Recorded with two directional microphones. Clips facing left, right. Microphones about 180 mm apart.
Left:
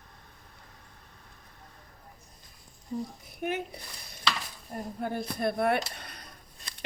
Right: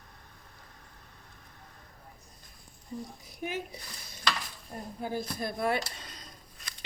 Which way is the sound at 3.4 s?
60° left (ahead or behind).